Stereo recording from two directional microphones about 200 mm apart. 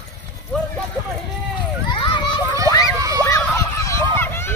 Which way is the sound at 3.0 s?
15° right (ahead or behind).